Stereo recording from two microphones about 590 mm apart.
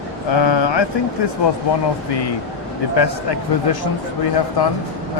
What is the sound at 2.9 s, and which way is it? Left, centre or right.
Speech, left.